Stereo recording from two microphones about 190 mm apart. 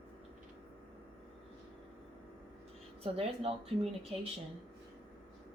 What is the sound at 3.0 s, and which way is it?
Speech, 30° right (ahead or behind).